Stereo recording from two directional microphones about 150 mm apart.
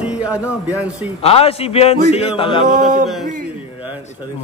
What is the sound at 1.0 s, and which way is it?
A man's voice, 40° left (ahead or behind).